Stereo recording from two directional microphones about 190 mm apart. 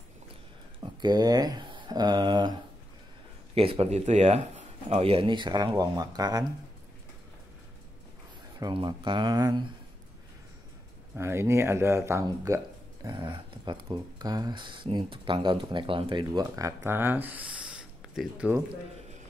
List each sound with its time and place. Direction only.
1.0 s speech: 20° right (ahead or behind)
3.5 s speech: 30° right (ahead or behind)
8.5 s speech: 25° right (ahead or behind)
11.1 s speech: 15° right (ahead or behind)